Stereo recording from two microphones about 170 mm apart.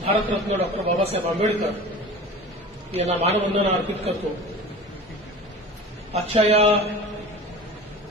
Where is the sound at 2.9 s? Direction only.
40° right (ahead or behind).